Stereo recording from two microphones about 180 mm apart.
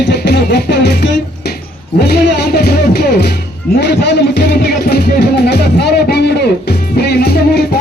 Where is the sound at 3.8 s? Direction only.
70° left (ahead or behind).